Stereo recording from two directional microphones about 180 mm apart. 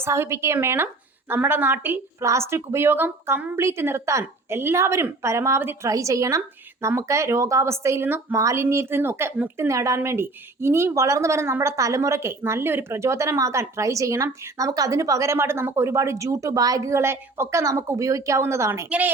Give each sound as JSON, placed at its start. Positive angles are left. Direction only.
{"t": 0.0, "sound": "a woman's voice", "side_deg": -15}